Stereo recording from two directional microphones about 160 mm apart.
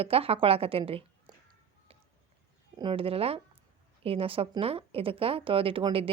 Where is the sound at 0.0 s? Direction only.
35° right (ahead or behind).